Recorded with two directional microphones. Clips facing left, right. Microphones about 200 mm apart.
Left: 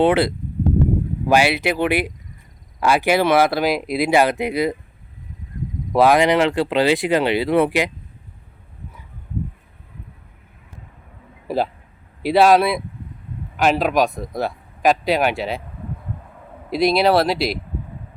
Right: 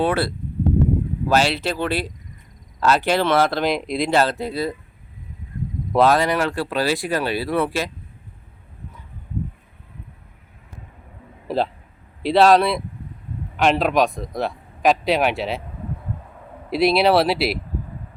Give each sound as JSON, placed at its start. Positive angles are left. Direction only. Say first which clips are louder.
{"t": 0.0, "sound": "speech", "louder": "left 5 dB", "side_deg": 20}
{"t": 5.9, "sound": "speech", "louder": "left 3 dB", "side_deg": 10}
{"t": 11.4, "sound": "a man's voice", "louder": "left 1 dB", "side_deg": 5}
{"t": 16.6, "sound": "speech", "louder": "even", "side_deg": -5}